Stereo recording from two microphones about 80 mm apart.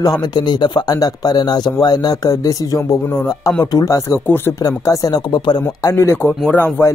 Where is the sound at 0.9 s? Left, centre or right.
Left.